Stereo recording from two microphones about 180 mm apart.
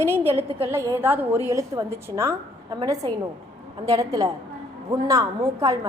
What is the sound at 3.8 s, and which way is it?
A woman's voice, 20° right (ahead or behind).